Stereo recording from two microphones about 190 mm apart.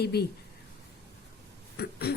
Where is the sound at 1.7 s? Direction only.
55° left (ahead or behind).